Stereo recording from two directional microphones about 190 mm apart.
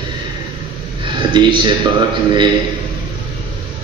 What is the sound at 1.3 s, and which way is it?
Speech, 25° right (ahead or behind).